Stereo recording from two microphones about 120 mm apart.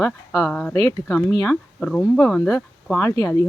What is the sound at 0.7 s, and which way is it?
Speech, 30° left (ahead or behind).